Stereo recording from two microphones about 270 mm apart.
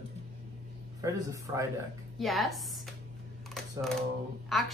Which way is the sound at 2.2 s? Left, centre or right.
Centre.